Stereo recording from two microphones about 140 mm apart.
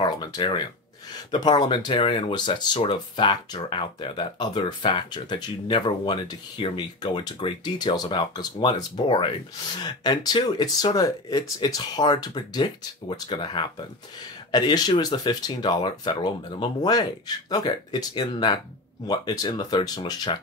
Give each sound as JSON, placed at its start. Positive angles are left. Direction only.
{"t": 0.0, "sound": "speech", "side_deg": 30}